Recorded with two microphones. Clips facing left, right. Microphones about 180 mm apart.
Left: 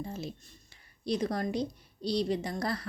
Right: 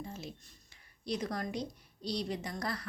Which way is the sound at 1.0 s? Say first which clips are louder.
Left 5 dB; 30° left (ahead or behind).